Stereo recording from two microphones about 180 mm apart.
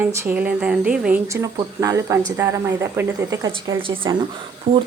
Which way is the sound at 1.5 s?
15° right (ahead or behind).